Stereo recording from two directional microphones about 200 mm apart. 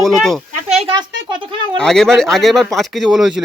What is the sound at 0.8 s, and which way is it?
Speech, 25° right (ahead or behind).